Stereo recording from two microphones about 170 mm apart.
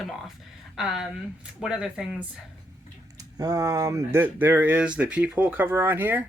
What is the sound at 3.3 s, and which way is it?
Speech, 20° right (ahead or behind).